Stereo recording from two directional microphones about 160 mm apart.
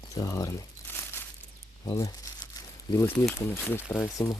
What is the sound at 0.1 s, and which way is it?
Crumpling, 20° left (ahead or behind).